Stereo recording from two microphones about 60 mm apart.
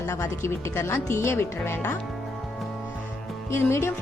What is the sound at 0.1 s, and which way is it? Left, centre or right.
Speech, left.